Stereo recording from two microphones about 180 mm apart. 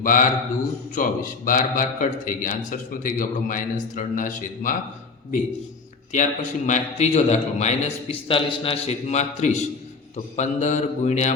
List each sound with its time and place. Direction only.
0.0 s a man's voice: 50° left (ahead or behind)
6.1 s a man's voice: 45° left (ahead or behind)